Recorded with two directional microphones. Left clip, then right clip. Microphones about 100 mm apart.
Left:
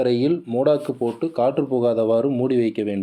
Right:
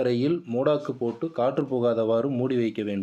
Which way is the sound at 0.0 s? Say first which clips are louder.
Left 5 dB; 25° left (ahead or behind).